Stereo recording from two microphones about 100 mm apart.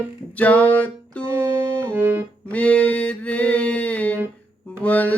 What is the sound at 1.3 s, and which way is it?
Music, 25° right (ahead or behind).